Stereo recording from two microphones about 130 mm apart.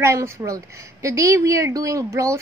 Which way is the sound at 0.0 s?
20° right (ahead or behind).